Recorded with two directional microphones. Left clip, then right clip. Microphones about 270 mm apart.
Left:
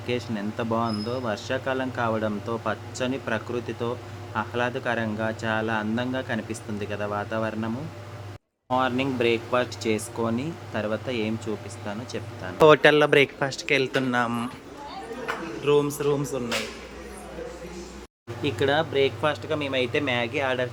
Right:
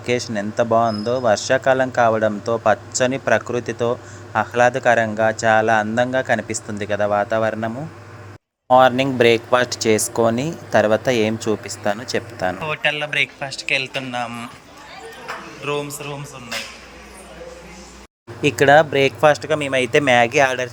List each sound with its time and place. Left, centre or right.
0.0 s speech: centre
8.7 s speech: right
12.6 s a man's voice: left
15.6 s a man's voice: centre
18.4 s speech: right